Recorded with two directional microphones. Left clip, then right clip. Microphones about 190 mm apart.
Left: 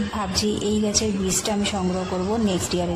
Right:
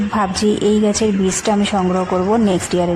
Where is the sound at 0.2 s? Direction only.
35° right (ahead or behind).